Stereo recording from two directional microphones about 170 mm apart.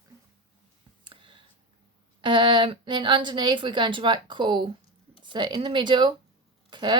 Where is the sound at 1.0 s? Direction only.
30° right (ahead or behind).